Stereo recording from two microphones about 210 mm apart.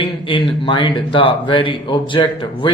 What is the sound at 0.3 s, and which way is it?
Speech, 25° left (ahead or behind).